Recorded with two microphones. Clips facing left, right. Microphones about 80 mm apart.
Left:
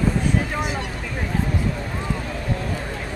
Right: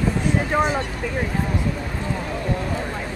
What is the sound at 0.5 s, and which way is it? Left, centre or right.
Vehicle, right.